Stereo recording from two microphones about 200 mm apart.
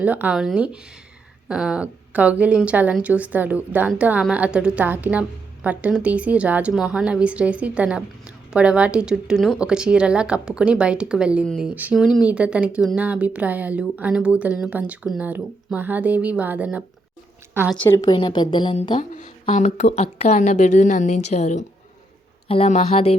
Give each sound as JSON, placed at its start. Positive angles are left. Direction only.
{"t": 0.0, "sound": "a woman's voice", "side_deg": -5}
{"t": 17.8, "sound": "a woman's voice", "side_deg": 20}